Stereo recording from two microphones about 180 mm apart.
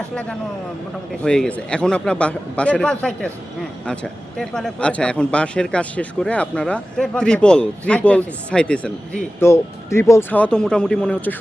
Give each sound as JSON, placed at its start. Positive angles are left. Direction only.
{"t": 1.2, "sound": "speech", "side_deg": 5}